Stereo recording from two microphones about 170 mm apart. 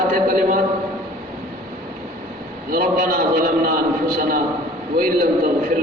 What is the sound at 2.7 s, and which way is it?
A man's voice, 60° right (ahead or behind).